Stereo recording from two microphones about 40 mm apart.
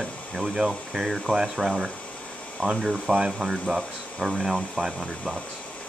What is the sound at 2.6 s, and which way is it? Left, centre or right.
Speech, left.